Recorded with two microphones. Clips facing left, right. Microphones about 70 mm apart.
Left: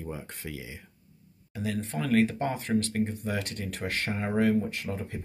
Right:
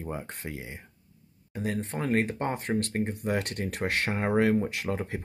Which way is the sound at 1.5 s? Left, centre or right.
Right.